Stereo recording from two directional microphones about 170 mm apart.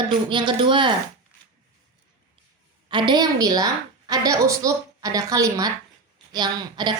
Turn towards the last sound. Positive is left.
turn(degrees=-25)  # may be behind; listen again after turning